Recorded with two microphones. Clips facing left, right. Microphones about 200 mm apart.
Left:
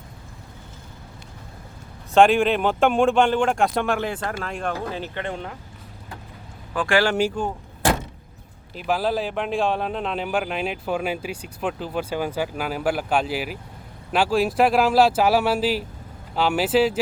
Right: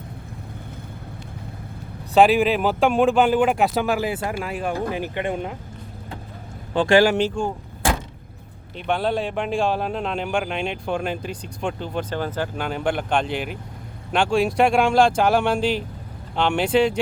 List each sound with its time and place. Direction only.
2.1 s speech: centre (ahead or behind)
6.7 s speech: 25° right (ahead or behind)
7.2 s speech: 5° left (ahead or behind)
8.7 s speech: 5° left (ahead or behind)